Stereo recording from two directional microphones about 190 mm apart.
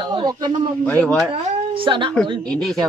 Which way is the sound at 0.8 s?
5° left (ahead or behind).